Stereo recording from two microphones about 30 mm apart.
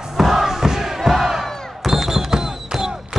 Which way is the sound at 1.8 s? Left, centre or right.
Centre.